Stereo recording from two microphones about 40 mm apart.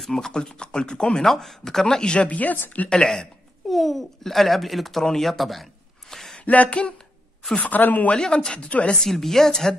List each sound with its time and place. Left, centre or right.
0.0 s speech: centre
0.3 s speech: left
1.2 s speech: centre
2.2 s a sound: left
2.9 s speech: centre
3.6 s a child's voice: centre
6.0 s a sound: centre
6.4 s a sound: left
7.7 s speech: left
8.1 s speech: centre
9.0 s speech: centre